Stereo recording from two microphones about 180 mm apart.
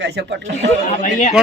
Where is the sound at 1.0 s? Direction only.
40° left (ahead or behind).